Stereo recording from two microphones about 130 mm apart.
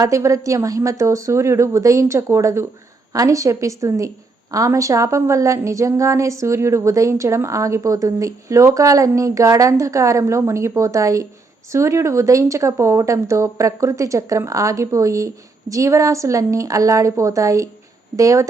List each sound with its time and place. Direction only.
0.0 s a woman's voice: 25° right (ahead or behind)